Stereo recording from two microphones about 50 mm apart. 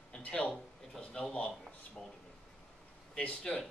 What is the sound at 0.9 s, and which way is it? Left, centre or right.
Speech, centre.